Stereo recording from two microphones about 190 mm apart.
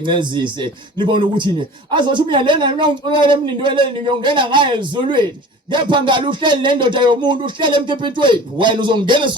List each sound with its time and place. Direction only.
0.0 s speech: 25° right (ahead or behind)